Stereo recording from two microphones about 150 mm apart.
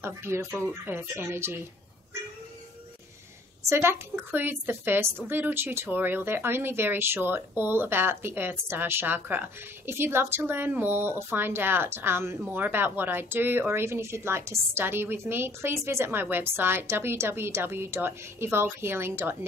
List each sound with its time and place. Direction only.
0.0 s a woman's voice: 15° right (ahead or behind)
3.6 s a woman's voice: 15° right (ahead or behind)